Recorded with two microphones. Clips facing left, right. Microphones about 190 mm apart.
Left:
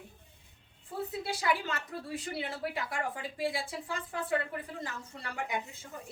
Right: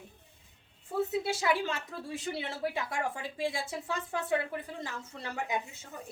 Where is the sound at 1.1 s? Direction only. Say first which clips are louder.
Even; 25° right (ahead or behind).